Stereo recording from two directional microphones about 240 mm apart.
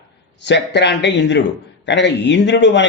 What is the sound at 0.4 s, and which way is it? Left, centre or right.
A man's voice, left.